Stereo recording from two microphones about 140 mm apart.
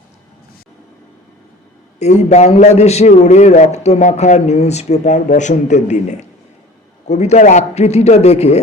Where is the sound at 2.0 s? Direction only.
50° left (ahead or behind).